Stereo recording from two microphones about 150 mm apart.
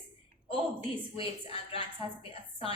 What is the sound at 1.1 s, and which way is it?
Speech, 40° left (ahead or behind).